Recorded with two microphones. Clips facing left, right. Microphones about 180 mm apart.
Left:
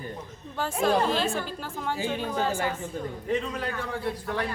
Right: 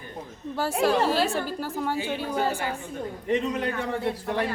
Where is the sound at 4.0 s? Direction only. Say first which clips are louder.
Right 3 dB; 25° right (ahead or behind).